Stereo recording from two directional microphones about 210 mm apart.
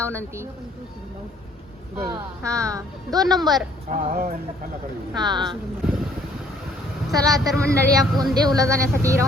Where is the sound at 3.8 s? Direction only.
40° right (ahead or behind).